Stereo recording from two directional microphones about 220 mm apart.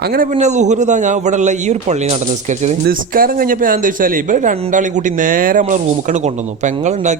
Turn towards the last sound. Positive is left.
turn(degrees=-30)  # may be behind; listen again after turning